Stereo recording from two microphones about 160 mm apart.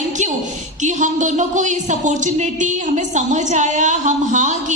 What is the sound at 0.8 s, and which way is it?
A woman's voice, 50° right (ahead or behind).